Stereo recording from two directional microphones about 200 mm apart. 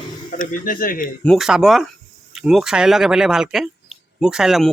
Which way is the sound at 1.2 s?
Centre (ahead or behind).